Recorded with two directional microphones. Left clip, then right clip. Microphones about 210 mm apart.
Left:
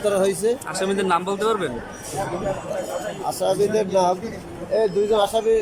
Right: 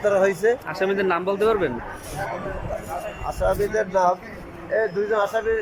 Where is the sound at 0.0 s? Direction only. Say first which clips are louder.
Right 1 dB; 15° left (ahead or behind).